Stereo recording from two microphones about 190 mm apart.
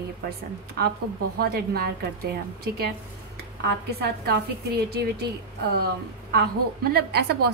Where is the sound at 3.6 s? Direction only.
60° right (ahead or behind).